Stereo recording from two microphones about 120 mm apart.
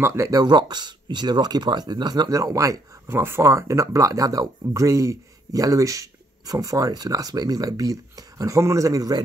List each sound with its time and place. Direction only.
0.0 s speech: 25° right (ahead or behind)